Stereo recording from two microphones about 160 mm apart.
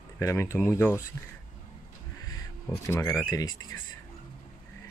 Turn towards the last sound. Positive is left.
turn(degrees=20)  # may be behind; listen again after turning